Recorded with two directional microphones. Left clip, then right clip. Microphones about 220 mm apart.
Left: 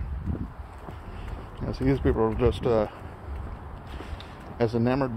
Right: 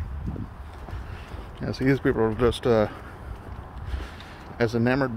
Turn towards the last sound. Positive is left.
turn(degrees=-20)  # may be behind; listen again after turning